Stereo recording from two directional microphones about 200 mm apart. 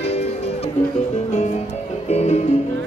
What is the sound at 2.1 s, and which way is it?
Music, 35° left (ahead or behind).